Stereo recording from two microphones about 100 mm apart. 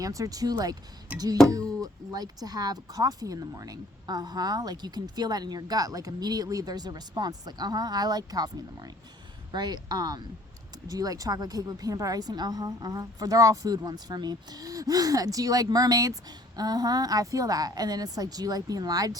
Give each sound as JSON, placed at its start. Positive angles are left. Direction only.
{"t": 0.0, "sound": "speech", "side_deg": -35}
{"t": 1.8, "sound": "speech", "side_deg": -40}
{"t": 9.5, "sound": "speech", "side_deg": -45}